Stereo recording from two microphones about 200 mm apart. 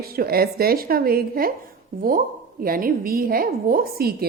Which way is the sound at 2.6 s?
45° right (ahead or behind).